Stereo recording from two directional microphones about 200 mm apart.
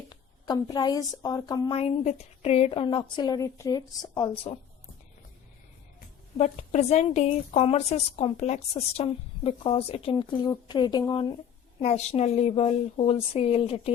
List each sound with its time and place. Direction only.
0.1 s speech: 20° left (ahead or behind)
1.7 s a woman's voice: 30° left (ahead or behind)
6.3 s a woman's voice: 35° left (ahead or behind)
11.8 s speech: 35° left (ahead or behind)